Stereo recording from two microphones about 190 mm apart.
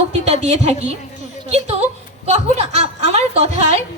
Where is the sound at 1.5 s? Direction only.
35° right (ahead or behind).